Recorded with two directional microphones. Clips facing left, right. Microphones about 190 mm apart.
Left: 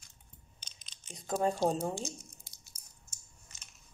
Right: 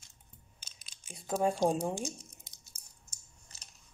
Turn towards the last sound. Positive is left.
turn(degrees=-35)  # may be behind; listen again after turning